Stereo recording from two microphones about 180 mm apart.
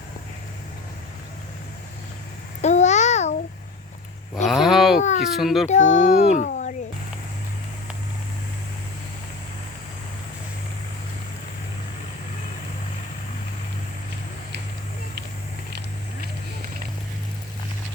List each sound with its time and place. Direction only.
2.6 s babbling: 40° left (ahead or behind)
4.4 s a sound: centre (ahead or behind)
5.2 s a child's voice: centre (ahead or behind)
5.6 s a child's voice: 40° left (ahead or behind)